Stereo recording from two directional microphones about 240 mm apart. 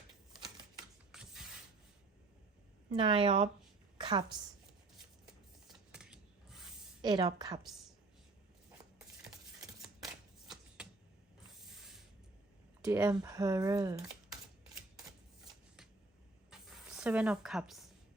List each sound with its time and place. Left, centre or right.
1.1 s mechanisms: centre
3.0 s a woman's voice: right
5.2 s scissors: centre
7.0 s speech: centre
9.7 s shuffling cards: centre
12.8 s speech: centre
17.0 s speech: centre